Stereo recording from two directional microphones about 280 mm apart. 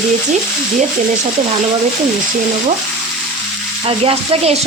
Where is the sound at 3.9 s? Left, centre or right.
Right.